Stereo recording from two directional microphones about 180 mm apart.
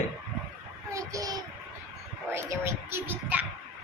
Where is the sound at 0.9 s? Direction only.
20° right (ahead or behind).